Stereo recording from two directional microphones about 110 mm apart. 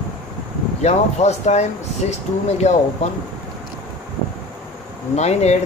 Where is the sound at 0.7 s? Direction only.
90° left.